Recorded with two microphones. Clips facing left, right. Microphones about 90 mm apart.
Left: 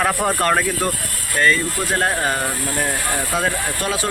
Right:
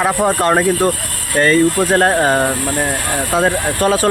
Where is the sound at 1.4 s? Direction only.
40° right (ahead or behind).